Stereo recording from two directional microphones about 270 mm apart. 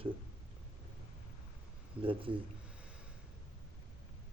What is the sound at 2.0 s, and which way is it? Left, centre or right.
Speech, centre.